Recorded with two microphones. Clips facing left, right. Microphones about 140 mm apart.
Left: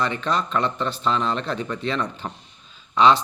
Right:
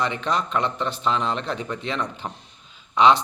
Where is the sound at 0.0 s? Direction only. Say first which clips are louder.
Left 1 dB; 15° right (ahead or behind).